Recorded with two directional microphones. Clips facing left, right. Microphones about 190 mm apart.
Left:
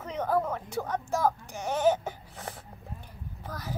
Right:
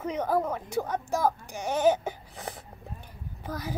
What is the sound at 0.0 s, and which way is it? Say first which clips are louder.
A woman's voice: right 1 dB; 10° right (ahead or behind).